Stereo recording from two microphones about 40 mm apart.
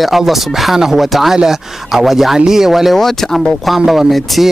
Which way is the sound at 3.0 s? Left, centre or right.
Centre.